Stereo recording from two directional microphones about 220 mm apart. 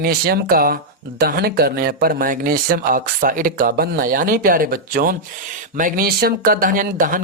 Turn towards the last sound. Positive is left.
turn(degrees=-40)  # may be behind; listen again after turning